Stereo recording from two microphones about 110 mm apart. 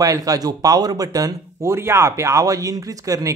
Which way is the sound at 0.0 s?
30° right (ahead or behind).